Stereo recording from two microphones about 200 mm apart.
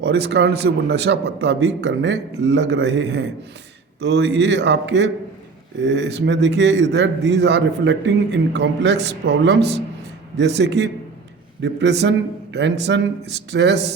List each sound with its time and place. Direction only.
0.0 s a man's voice: 55° right (ahead or behind)